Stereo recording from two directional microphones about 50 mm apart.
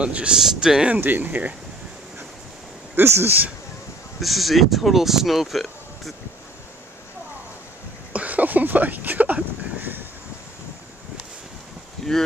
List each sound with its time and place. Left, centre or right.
0.0 s speech: right
0.3 s speech: centre
1.0 s speech: right
3.0 s speech: right
4.2 s speech: centre
8.1 s a sound: right
12.0 s a sound: centre